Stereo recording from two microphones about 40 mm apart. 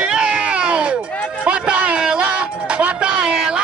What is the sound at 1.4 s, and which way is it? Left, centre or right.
Music, right.